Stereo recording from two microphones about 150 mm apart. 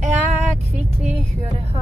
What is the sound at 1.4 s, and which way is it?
Speech, 45° right (ahead or behind).